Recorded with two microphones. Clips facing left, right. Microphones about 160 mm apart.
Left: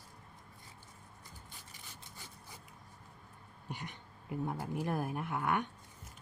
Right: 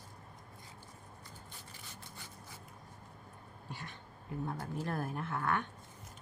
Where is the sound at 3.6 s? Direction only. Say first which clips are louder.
Left 3 dB; 15° left (ahead or behind).